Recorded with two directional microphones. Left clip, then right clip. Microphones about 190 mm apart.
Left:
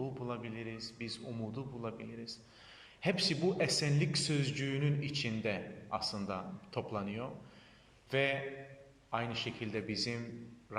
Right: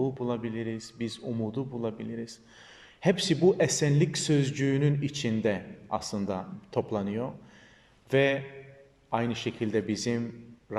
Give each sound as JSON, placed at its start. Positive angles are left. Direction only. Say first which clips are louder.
{"t": 0.0, "sound": "speech", "louder": "right 10 dB", "side_deg": -30}